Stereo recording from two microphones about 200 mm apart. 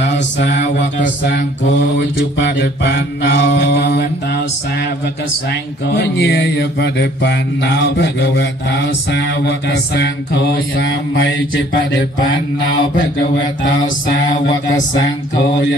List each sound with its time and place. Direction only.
0.0 s mantra: 60° left (ahead or behind)
5.5 s mantra: 55° left (ahead or behind)